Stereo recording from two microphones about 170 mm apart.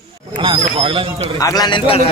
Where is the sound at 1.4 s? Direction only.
20° left (ahead or behind).